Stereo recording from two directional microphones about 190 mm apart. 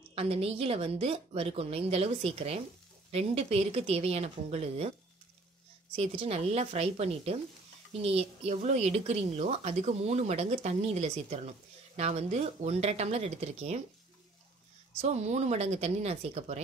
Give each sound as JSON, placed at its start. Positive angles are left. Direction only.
{"t": 0.1, "sound": "a woman's voice", "side_deg": -30}
{"t": 5.9, "sound": "a woman's voice", "side_deg": -30}
{"t": 15.0, "sound": "a woman's voice", "side_deg": -35}